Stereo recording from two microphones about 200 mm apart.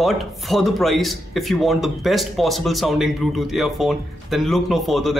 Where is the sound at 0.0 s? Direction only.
Centre (ahead or behind).